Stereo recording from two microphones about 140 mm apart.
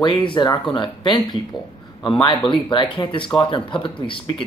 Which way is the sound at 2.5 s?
35° left (ahead or behind).